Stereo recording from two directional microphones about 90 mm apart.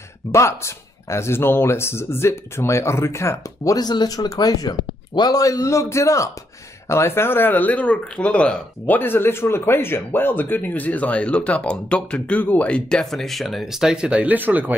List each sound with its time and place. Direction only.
0.3 s speech: 35° left (ahead or behind)
3.7 s speech: 50° left (ahead or behind); by 14.8 s 20° right (ahead or behind)